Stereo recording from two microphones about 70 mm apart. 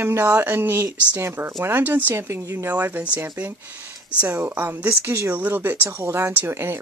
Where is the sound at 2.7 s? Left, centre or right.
Right.